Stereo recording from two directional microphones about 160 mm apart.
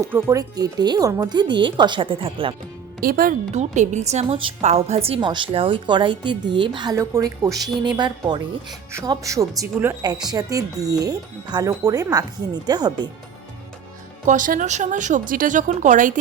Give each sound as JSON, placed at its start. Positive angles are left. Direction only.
{"t": 0.0, "sound": "speech", "side_deg": -15}
{"t": 3.0, "sound": "a woman's voice", "side_deg": -65}
{"t": 3.5, "sound": "a woman's voice", "side_deg": -45}
{"t": 14.3, "sound": "speech", "side_deg": -55}